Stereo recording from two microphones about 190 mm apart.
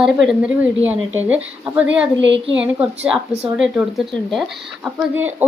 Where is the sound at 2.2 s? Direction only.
70° right (ahead or behind).